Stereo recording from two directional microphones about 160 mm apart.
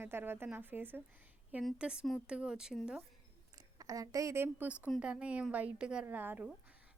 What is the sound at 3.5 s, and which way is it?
A woman's voice, 25° right (ahead or behind).